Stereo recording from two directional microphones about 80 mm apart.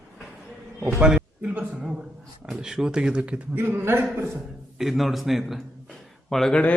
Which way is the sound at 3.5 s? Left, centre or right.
Right.